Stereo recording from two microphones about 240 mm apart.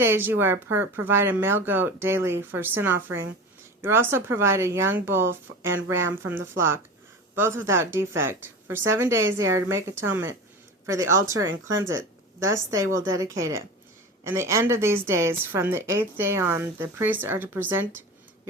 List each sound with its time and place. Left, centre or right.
0.0 s a woman's voice: centre
11.8 s a sound: centre
12.7 s a woman's voice: centre